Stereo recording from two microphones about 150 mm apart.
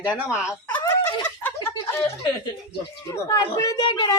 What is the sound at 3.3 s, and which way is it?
Snicker, 20° left (ahead or behind).